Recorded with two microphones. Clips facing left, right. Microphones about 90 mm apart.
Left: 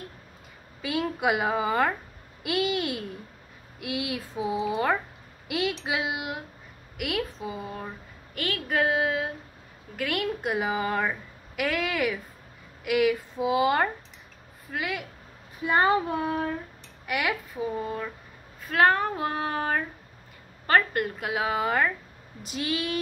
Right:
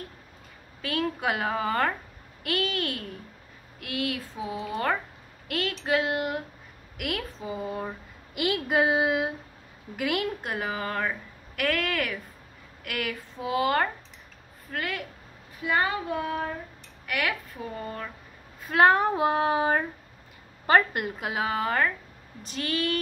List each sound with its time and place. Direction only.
0.8 s a woman's voice: 10° left (ahead or behind)
8.4 s child singing: 20° right (ahead or behind)
9.9 s a woman's voice: 5° right (ahead or behind)
10.4 s speech: 10° left (ahead or behind)
15.6 s speech: 30° left (ahead or behind)
17.0 s speech: 15° left (ahead or behind)
18.7 s child singing: 10° right (ahead or behind)
20.6 s a woman's voice: 15° right (ahead or behind); by 22.9 s 10° left (ahead or behind)